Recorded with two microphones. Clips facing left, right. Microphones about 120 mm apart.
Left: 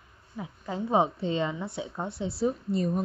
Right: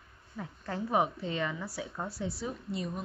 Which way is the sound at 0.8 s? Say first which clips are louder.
Left 4 dB; 30° left (ahead or behind).